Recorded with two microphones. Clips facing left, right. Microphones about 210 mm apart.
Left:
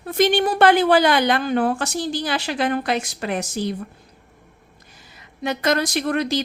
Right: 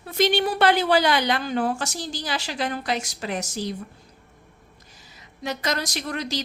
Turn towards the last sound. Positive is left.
turn(degrees=55)  # may be behind; listen again after turning